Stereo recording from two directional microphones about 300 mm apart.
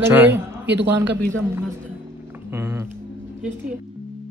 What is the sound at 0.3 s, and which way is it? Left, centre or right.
A man's voice, right.